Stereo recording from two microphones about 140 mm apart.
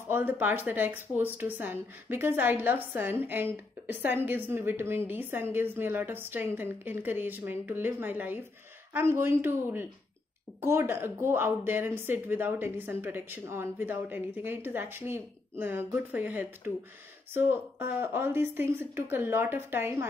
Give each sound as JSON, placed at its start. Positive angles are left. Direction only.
{"t": 0.1, "sound": "a woman's voice", "side_deg": -15}